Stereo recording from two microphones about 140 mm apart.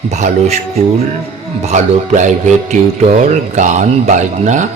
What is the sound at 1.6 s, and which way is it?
Speech, 55° right (ahead or behind).